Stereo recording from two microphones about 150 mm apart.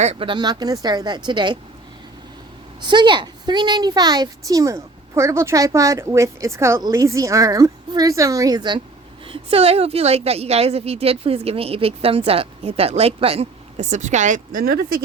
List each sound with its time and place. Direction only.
0.0 s a woman's voice: 40° right (ahead or behind)
2.8 s a woman's voice: 30° right (ahead or behind); by 15.0 s 85° right